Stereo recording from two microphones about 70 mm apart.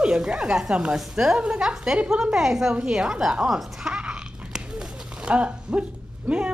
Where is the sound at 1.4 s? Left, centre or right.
Centre.